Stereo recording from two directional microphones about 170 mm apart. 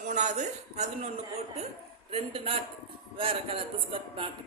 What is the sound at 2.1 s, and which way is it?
A man's voice, 35° right (ahead or behind).